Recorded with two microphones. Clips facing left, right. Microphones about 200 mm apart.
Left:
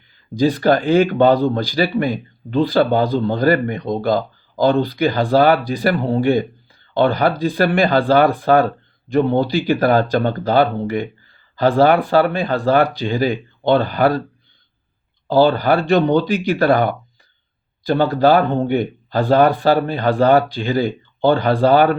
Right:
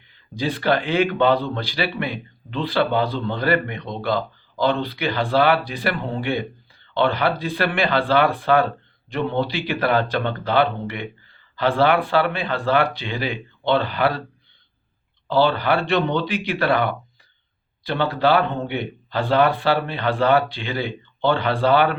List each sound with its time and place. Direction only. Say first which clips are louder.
0.3 s speech: left 6 dB; 40° left (ahead or behind)
15.3 s speech: left 5 dB; 40° left (ahead or behind)